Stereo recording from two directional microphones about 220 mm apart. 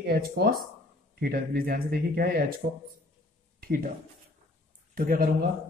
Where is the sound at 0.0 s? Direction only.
45° right (ahead or behind).